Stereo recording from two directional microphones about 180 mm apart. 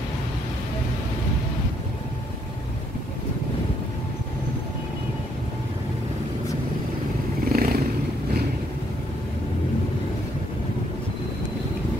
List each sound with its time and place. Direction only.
7.4 s vehicle: 55° right (ahead or behind)